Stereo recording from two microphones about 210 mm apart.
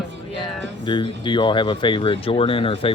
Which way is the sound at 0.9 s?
20° left (ahead or behind).